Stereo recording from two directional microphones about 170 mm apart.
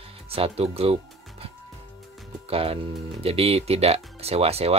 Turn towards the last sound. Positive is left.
turn(degrees=-35)  # may be behind; listen again after turning